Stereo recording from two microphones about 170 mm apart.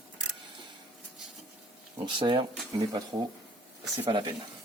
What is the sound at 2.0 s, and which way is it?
Speech, 25° right (ahead or behind).